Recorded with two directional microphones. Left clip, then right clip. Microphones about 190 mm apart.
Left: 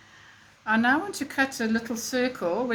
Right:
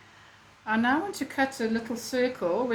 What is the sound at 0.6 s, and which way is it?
Speech, 30° left (ahead or behind).